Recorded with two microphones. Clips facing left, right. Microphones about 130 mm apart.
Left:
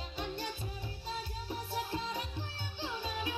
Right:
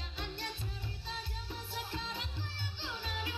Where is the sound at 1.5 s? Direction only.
45° left (ahead or behind).